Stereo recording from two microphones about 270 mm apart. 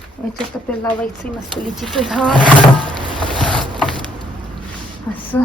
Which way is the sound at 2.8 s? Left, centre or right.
Centre.